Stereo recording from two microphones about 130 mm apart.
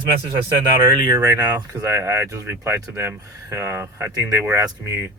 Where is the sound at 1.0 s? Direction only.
25° right (ahead or behind).